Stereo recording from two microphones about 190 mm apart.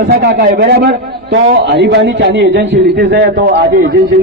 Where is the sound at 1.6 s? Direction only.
65° right (ahead or behind).